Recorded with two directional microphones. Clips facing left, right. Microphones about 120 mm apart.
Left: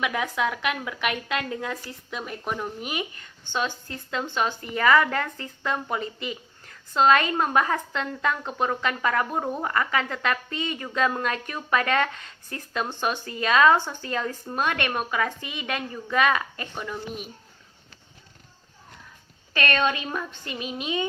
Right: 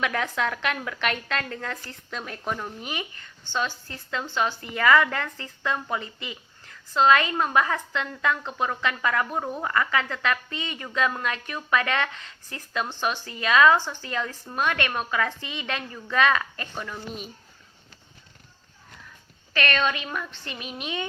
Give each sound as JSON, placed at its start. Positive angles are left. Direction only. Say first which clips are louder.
{"t": 0.0, "sound": "a woman's voice", "louder": "left 1 dB", "side_deg": 10}
{"t": 4.7, "sound": "a woman's voice", "louder": "even", "side_deg": 30}
{"t": 7.0, "sound": "a woman's voice", "louder": "even", "side_deg": 40}
{"t": 13.1, "sound": "a woman's voice", "louder": "left 1 dB", "side_deg": 35}
{"t": 13.7, "sound": "a woman's voice", "louder": "left 1 dB", "side_deg": 50}
{"t": 14.1, "sound": "a woman's voice", "louder": "left 3 dB", "side_deg": 40}
{"t": 14.9, "sound": "a woman's voice", "louder": "even", "side_deg": 15}
{"t": 19.5, "sound": "a woman's voice", "louder": "left 1 dB", "side_deg": 20}